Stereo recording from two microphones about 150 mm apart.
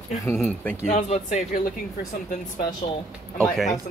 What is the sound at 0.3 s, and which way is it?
Speech, 10° left (ahead or behind).